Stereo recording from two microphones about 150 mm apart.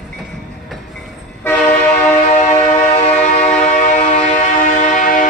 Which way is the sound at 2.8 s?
50° left (ahead or behind).